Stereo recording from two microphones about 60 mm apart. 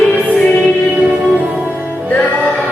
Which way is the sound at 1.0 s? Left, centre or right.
Centre.